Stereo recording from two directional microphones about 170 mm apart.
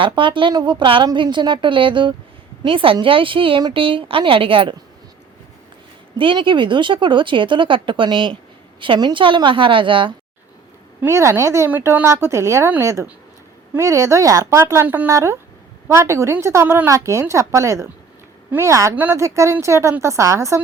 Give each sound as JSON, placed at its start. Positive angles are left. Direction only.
{"t": 0.0, "sound": "a woman's voice", "side_deg": -30}
{"t": 6.1, "sound": "speech", "side_deg": -30}
{"t": 11.0, "sound": "a woman's voice", "side_deg": -15}